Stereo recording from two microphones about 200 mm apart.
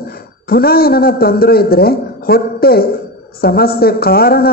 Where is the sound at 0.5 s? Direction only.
50° left (ahead or behind).